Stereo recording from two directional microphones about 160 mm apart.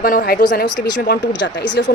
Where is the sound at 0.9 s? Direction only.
90° left.